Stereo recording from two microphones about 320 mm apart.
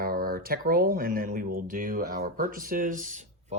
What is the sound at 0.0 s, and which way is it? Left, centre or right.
Speech, right.